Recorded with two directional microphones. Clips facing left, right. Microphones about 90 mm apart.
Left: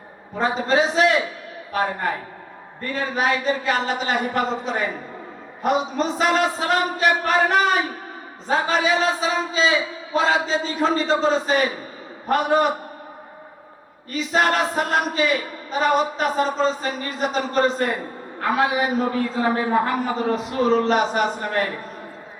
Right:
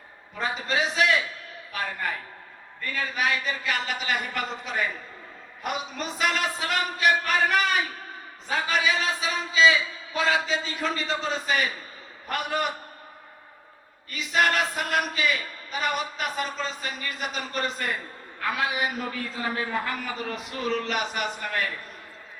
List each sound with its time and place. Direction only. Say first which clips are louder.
0.3 s speech: left 8 dB; 35° left (ahead or behind)
14.1 s speech: left 4 dB; 35° left (ahead or behind)